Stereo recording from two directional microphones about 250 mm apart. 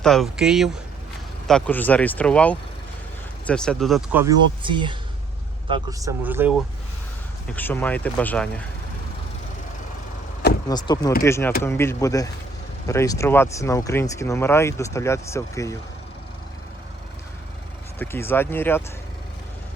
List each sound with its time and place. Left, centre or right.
0.0 s speech: centre
4.2 s speech: centre
7.5 s speech: centre
10.7 s speech: centre
18.0 s speech: centre